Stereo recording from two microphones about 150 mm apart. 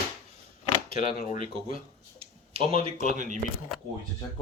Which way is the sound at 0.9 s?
40° right (ahead or behind).